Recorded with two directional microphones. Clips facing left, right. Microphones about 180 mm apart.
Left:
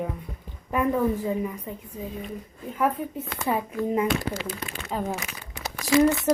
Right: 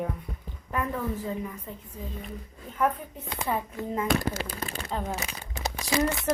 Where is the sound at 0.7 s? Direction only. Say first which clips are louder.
Left 7 dB; 15° left (ahead or behind).